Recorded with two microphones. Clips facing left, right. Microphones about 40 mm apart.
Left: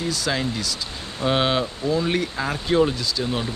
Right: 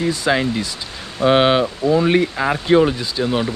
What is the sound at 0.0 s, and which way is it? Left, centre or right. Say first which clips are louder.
Speech: right 6 dB; right.